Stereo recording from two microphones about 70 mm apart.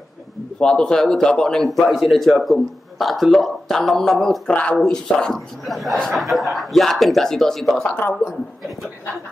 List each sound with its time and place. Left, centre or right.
0.6 s a man's voice: centre
4.5 s a man's voice: centre